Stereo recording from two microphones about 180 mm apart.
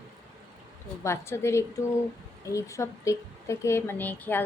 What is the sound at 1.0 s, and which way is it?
A woman's voice, 15° left (ahead or behind).